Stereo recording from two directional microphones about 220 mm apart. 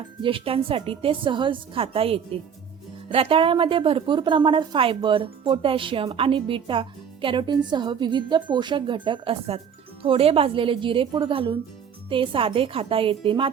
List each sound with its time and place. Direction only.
0.2 s a woman's voice: 25° right (ahead or behind)